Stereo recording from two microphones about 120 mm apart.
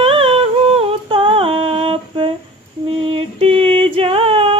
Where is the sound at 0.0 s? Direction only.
50° right (ahead or behind).